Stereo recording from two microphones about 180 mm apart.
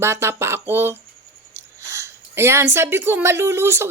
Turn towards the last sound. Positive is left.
turn(degrees=-15)  # may be behind; listen again after turning